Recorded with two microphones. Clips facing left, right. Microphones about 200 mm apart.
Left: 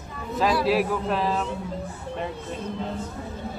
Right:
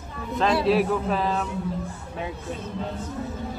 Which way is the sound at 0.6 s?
Centre (ahead or behind).